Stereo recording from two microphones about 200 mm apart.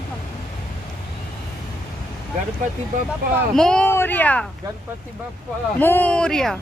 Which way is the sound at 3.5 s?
5° left (ahead or behind).